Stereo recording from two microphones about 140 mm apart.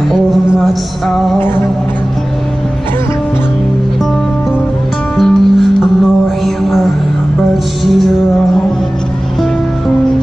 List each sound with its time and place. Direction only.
5.1 s music: centre (ahead or behind)